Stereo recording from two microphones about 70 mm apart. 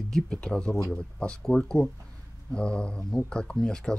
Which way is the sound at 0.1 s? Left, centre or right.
Centre.